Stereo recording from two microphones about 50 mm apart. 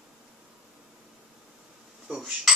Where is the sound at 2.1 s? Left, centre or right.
Centre.